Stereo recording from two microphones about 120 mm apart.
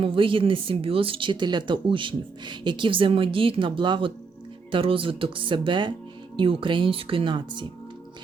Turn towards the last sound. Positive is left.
turn(degrees=-45)  # may be behind; listen again after turning